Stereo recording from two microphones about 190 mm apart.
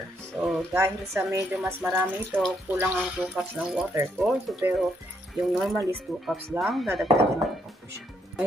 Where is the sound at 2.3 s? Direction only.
Centre (ahead or behind).